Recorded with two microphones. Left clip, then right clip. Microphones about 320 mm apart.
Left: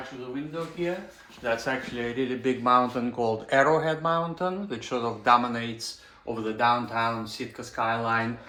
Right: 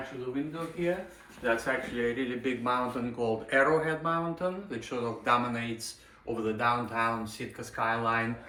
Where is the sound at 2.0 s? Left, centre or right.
Left.